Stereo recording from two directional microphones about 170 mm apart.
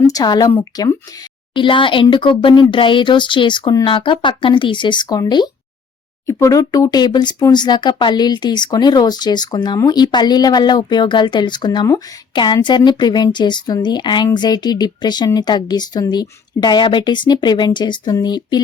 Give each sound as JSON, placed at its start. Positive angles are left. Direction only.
{"t": 0.1, "sound": "speech", "side_deg": 20}
{"t": 1.5, "sound": "speech", "side_deg": 30}